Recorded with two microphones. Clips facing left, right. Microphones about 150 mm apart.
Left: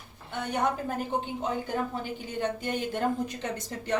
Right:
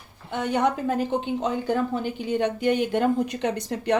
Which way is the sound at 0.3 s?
90° right.